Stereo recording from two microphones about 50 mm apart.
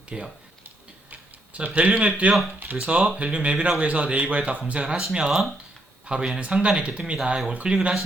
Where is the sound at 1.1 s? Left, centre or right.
Right.